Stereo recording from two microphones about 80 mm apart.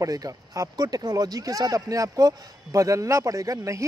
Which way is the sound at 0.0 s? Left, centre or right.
Right.